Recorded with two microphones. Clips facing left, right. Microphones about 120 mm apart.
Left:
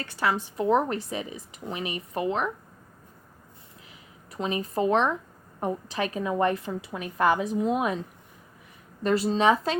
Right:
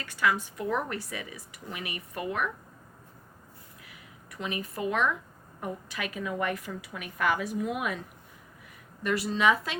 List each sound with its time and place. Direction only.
0.0 s a woman's voice: 35° left (ahead or behind)
3.8 s a sound: 30° left (ahead or behind)
5.5 s a woman's voice: 30° left (ahead or behind)
9.0 s a woman's voice: 30° left (ahead or behind)